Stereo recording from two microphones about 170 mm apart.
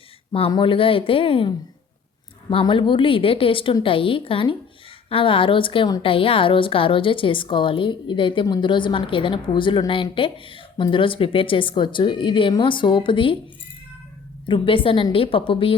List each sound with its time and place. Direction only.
0.3 s a woman's voice: 30° left (ahead or behind)
14.4 s a woman's voice: 30° left (ahead or behind)